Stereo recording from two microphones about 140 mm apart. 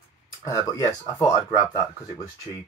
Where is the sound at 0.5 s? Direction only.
20° left (ahead or behind).